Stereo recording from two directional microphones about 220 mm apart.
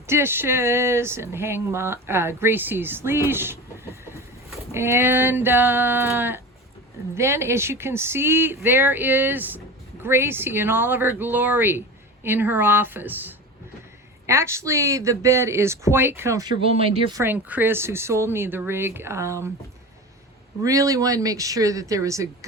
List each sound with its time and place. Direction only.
0.1 s speech: 10° right (ahead or behind)
4.7 s speech: 10° right (ahead or behind)
16.6 s speech: 25° right (ahead or behind)
17.2 s speech: 10° right (ahead or behind)
20.7 s speech: 15° right (ahead or behind)